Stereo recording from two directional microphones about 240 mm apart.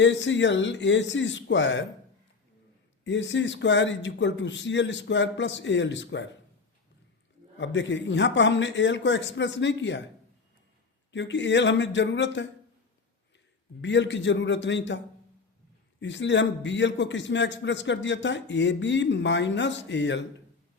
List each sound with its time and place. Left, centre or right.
0.0 s a man's voice: left
3.0 s a man's voice: left
7.6 s a man's voice: left
11.1 s a man's voice: left
13.8 s a man's voice: left
16.0 s a man's voice: left